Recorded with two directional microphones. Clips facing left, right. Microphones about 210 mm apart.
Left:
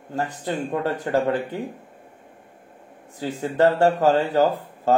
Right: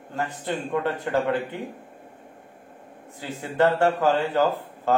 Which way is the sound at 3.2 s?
40° left (ahead or behind).